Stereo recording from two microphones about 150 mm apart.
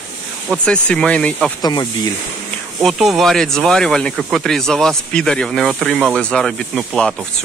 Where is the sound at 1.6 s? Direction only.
30° left (ahead or behind).